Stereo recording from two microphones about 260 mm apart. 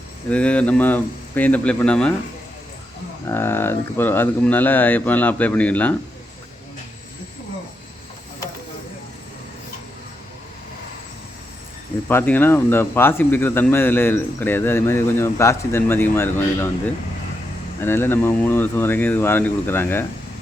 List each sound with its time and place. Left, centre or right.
0.3 s speech: centre
3.2 s speech: centre
12.0 s speech: centre